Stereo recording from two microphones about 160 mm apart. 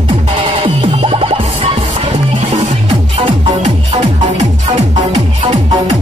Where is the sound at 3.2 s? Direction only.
45° right (ahead or behind).